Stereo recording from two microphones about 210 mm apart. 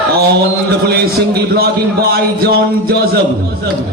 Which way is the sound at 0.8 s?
50° right (ahead or behind).